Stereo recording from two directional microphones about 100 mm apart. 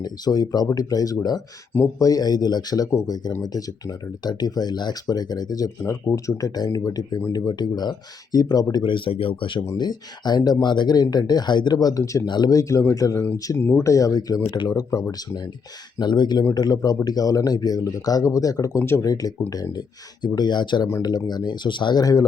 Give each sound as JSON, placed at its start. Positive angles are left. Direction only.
{"t": 0.0, "sound": "speech", "side_deg": 40}
{"t": 8.7, "sound": "speech", "side_deg": 55}
{"t": 9.7, "sound": "speech", "side_deg": 45}
{"t": 13.1, "sound": "speech", "side_deg": 25}
{"t": 13.9, "sound": "speech", "side_deg": 35}
{"t": 16.0, "sound": "speech", "side_deg": 45}
{"t": 19.0, "sound": "speech", "side_deg": 40}